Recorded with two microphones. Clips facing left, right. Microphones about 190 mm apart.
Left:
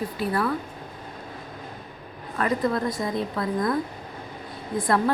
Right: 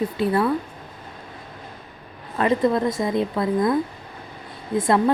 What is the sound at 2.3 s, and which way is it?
Speech, 25° right (ahead or behind).